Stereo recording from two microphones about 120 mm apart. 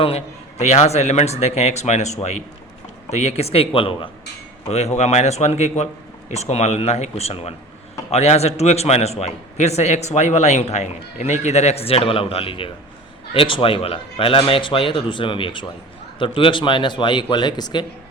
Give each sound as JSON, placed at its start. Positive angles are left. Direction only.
{"t": 0.0, "sound": "a man's voice", "side_deg": 60}
{"t": 4.9, "sound": "a man's voice", "side_deg": 65}